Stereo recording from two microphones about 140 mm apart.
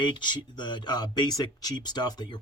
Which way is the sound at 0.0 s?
35° left (ahead or behind).